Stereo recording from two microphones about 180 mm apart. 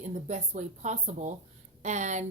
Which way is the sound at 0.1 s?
40° right (ahead or behind).